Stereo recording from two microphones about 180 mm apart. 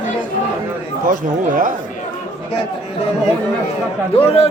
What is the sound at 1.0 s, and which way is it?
Speech, 50° right (ahead or behind).